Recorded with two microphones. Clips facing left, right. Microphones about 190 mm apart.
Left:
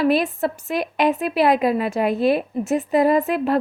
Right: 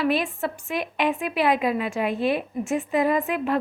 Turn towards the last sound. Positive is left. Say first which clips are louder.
# left 5 dB
turn(degrees=35)  # may be behind; listen again after turning